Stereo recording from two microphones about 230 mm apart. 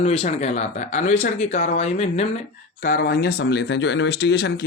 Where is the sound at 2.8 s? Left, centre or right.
Left.